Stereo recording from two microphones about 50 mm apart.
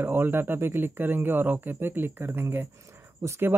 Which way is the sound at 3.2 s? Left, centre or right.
Right.